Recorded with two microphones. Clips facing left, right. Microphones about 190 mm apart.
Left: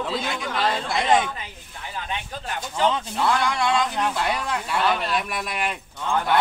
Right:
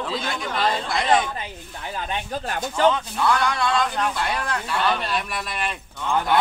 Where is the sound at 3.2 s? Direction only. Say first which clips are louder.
Right 1 dB; 25° left (ahead or behind).